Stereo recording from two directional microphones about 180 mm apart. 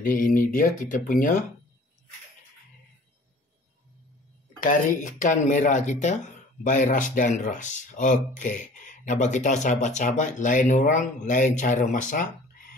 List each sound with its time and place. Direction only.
0.0 s speech: 50° left (ahead or behind)
4.6 s speech: 45° left (ahead or behind)